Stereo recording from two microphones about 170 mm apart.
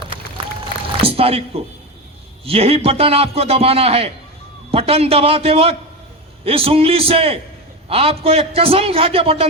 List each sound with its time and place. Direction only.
1.0 s a man's voice: 35° right (ahead or behind)